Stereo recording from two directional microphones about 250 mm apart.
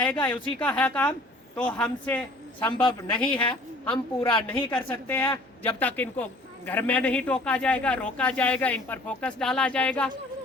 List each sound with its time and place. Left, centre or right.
0.0 s speech: centre
2.8 s a woman's voice: centre
4.4 s a man's voice: centre